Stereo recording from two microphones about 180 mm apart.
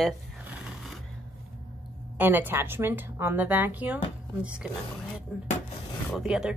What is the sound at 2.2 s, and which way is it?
A woman's voice, 10° right (ahead or behind).